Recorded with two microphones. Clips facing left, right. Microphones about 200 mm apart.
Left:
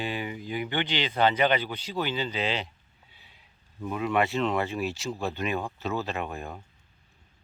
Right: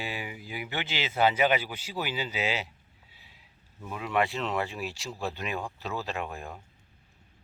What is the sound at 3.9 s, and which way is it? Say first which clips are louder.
Speech: left 3 dB; centre (ahead or behind).